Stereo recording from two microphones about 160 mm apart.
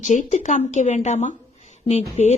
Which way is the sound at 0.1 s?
50° left (ahead or behind).